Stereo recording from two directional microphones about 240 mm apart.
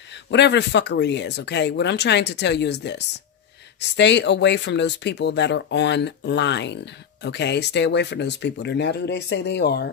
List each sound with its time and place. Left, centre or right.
0.1 s speech: left